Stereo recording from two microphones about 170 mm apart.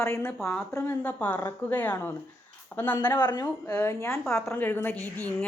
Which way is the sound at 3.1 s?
25° left (ahead or behind).